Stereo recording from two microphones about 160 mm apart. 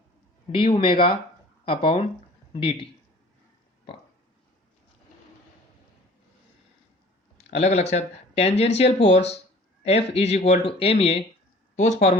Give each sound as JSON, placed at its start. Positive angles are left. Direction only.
{"t": 0.5, "sound": "speech", "side_deg": 35}
{"t": 7.3, "sound": "speech", "side_deg": 40}